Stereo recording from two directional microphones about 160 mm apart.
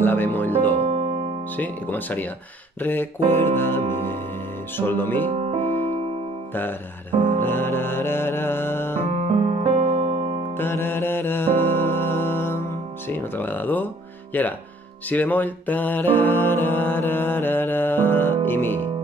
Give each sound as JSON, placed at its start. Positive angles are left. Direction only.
{"t": 0.0, "sound": "speech", "side_deg": 10}
{"t": 0.8, "sound": "music", "side_deg": -40}
{"t": 1.6, "sound": "music", "side_deg": 10}
{"t": 5.3, "sound": "piano", "side_deg": -40}
{"t": 6.5, "sound": "music", "side_deg": 10}
{"t": 9.1, "sound": "piano", "side_deg": -40}
{"t": 10.5, "sound": "music", "side_deg": 15}